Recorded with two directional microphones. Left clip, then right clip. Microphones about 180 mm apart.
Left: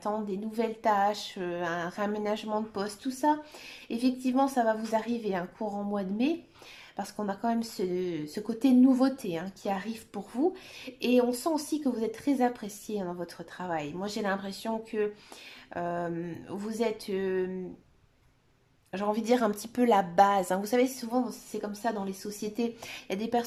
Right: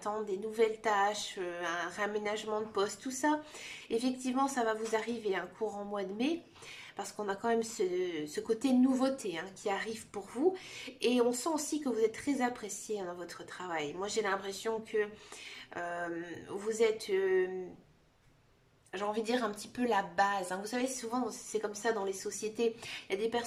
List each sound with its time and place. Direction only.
0.0 s speech: 30° left (ahead or behind)
18.9 s a woman's voice: 30° left (ahead or behind)